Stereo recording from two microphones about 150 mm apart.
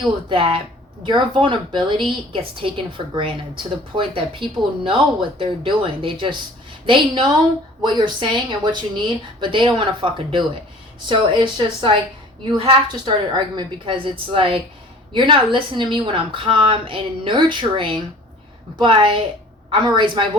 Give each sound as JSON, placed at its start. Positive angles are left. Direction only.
{"t": 0.3, "sound": "a woman's voice", "side_deg": -35}